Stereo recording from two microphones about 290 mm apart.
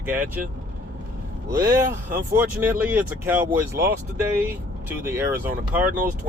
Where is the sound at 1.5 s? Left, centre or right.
Centre.